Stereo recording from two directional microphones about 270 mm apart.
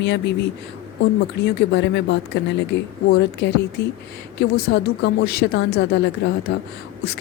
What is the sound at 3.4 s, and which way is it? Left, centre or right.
Speech, left.